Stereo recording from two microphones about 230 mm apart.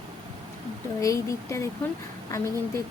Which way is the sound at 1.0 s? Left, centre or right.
Centre.